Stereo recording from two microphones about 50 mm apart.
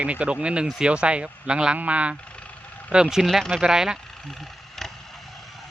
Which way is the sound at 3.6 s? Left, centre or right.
Centre.